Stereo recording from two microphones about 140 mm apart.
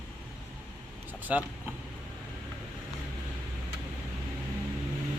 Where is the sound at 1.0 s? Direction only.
10° right (ahead or behind).